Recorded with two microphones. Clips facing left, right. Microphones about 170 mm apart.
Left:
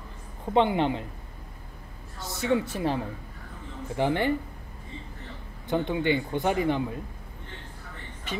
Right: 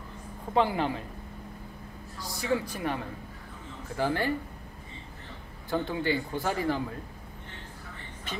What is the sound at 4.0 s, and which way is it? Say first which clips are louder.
Speech: left 3 dB; 20° left (ahead or behind).